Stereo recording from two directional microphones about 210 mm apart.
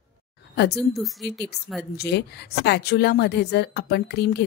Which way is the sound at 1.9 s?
50° left (ahead or behind).